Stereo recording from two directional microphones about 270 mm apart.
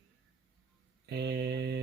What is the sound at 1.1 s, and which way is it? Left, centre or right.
Speech, right.